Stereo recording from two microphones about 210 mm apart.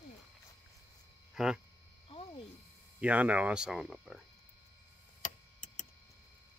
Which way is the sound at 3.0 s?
5° right (ahead or behind).